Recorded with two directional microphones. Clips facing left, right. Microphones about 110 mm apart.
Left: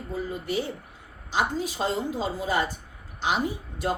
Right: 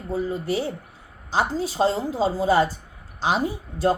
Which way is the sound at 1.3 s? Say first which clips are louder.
Right 3 dB; 35° right (ahead or behind).